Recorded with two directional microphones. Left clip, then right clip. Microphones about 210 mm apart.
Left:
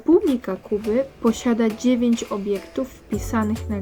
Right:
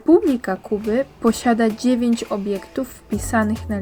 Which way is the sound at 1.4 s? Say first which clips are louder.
Right 3 dB; 20° right (ahead or behind).